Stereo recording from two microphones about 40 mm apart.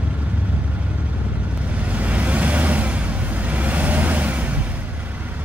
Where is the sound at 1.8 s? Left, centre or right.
Right.